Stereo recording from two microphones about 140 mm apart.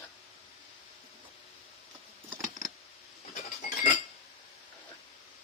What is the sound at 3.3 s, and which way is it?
Chink, 60° left (ahead or behind).